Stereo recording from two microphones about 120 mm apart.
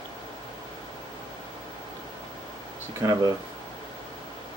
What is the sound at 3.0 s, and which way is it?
Speech, 30° right (ahead or behind).